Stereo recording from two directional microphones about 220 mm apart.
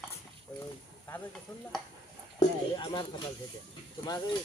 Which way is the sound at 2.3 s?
20° left (ahead or behind).